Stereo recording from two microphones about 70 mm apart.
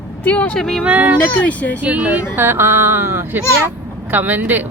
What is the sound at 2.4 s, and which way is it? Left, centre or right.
Speech, right.